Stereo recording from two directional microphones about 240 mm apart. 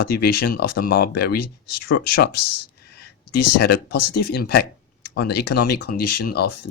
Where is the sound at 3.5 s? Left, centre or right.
Left.